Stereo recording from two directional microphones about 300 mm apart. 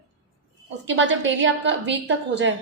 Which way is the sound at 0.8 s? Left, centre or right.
Right.